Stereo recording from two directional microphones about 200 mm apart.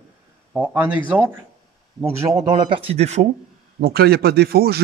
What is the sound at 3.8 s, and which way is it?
Speech, 50° right (ahead or behind).